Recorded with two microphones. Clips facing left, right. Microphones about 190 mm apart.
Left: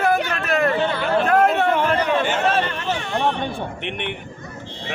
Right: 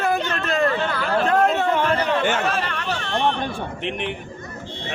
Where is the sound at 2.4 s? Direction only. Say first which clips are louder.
Left 4 dB; 25° left (ahead or behind).